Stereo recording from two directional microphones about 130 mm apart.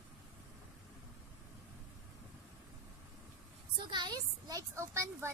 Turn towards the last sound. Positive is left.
turn(degrees=-20)  # may be behind; listen again after turning